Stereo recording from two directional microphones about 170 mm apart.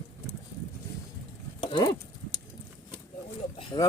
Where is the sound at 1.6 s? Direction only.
35° left (ahead or behind).